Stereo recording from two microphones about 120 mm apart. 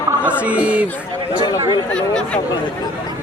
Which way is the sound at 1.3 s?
35° left (ahead or behind).